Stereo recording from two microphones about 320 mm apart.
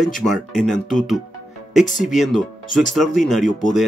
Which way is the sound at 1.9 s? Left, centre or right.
Centre.